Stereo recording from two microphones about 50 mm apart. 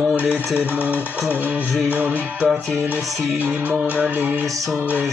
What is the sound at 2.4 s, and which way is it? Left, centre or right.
Music, centre.